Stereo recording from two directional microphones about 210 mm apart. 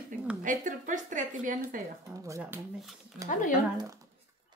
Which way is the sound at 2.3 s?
10° right (ahead or behind).